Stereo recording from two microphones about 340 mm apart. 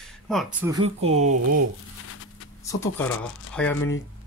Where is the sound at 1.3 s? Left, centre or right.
Right.